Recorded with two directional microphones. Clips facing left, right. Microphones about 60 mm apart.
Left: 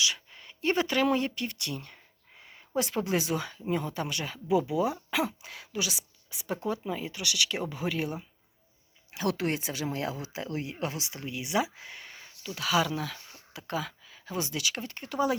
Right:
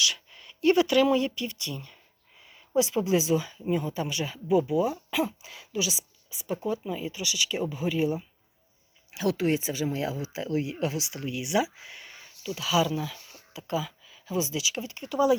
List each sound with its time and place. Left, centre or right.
0.0 s speech: left
4.4 s speech: left
5.4 s speech: left